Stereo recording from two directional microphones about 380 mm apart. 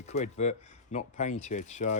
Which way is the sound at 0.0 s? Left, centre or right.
Centre.